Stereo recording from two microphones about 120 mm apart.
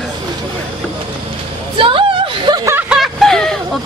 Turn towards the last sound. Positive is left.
turn(degrees=5)  # may be behind; listen again after turning